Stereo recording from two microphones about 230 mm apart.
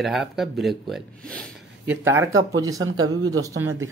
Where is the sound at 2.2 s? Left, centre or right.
Right.